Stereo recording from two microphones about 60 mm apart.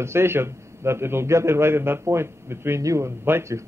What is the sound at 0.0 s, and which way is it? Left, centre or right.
A man's voice, right.